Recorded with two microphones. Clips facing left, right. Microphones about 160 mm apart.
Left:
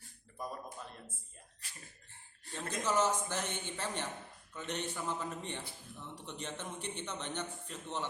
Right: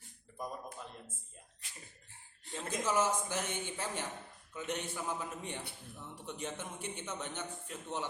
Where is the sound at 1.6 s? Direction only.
20° right (ahead or behind).